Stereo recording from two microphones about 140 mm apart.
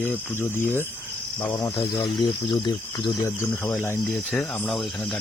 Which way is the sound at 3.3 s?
20° left (ahead or behind).